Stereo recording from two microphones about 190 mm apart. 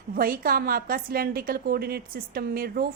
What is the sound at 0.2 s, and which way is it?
A woman's voice, 50° right (ahead or behind).